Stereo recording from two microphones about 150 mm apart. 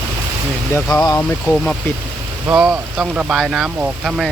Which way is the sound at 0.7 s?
20° left (ahead or behind).